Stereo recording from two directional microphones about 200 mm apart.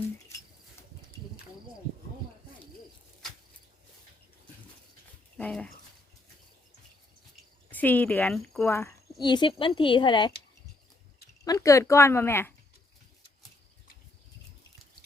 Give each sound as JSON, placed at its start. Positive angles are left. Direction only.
{"t": 5.4, "sound": "speech", "side_deg": 5}
{"t": 7.7, "sound": "speech", "side_deg": 10}
{"t": 9.2, "sound": "a woman's voice", "side_deg": 25}
{"t": 11.4, "sound": "speech", "side_deg": 15}